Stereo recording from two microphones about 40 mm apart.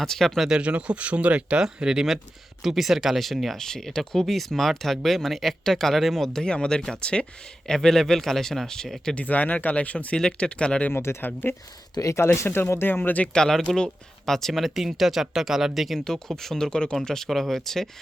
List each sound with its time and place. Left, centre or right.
0.0 s speech: centre
0.6 s speech: right
1.6 s speech: centre
2.6 s speech: centre
3.6 s speech: centre
6.4 s speech: left
7.7 s speech: centre
9.1 s speech: left
10.2 s speech: left
10.9 s speech: left
13.0 s speech: left
13.3 s speech: centre
16.0 s speech: centre
17.2 s speech: centre